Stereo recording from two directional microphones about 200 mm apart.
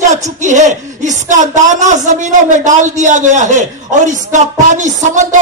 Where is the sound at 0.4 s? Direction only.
35° right (ahead or behind).